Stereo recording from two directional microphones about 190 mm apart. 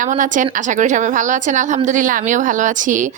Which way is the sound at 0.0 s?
40° right (ahead or behind).